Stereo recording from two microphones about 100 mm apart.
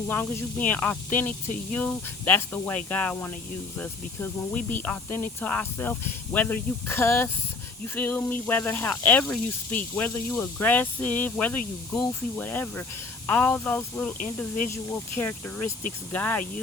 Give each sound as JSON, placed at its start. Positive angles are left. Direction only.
{"t": 0.1, "sound": "speech", "side_deg": 20}
{"t": 4.5, "sound": "speech", "side_deg": 15}